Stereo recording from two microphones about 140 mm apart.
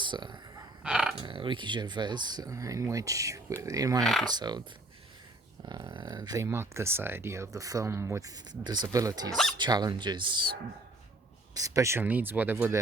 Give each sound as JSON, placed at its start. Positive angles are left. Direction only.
{"t": 0.0, "sound": "speech", "side_deg": -35}
{"t": 0.8, "sound": "a sound", "side_deg": -5}
{"t": 1.2, "sound": "speech", "side_deg": -35}
{"t": 4.0, "sound": "speech", "side_deg": 5}
{"t": 4.3, "sound": "speech", "side_deg": -30}
{"t": 5.6, "sound": "speech", "side_deg": -30}
{"t": 8.6, "sound": "speech", "side_deg": -30}